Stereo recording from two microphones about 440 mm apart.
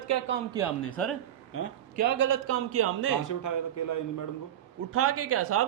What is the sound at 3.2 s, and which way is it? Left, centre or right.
Speech, left.